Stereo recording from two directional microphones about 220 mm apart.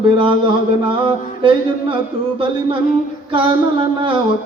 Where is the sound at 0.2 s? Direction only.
25° right (ahead or behind).